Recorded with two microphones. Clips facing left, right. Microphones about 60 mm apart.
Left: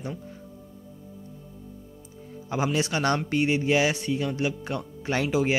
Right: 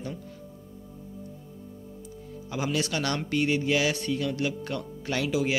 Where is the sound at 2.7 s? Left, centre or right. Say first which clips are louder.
Left 3 dB; left.